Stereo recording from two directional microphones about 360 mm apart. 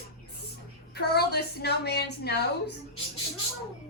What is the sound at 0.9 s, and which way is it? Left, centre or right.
A woman's voice, left.